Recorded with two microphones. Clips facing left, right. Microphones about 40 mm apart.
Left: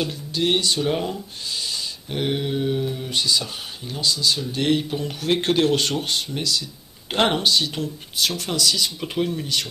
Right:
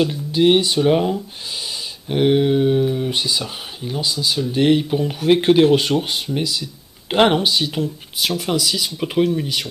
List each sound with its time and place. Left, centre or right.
0.0 s speech: centre